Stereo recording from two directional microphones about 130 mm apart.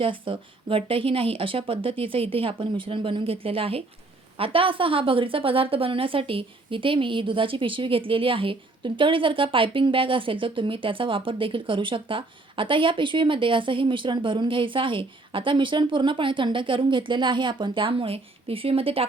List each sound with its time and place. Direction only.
0.0 s a woman's voice: 40° right (ahead or behind)